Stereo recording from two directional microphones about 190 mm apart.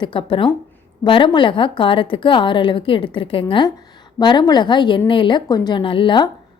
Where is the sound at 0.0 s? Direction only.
25° left (ahead or behind).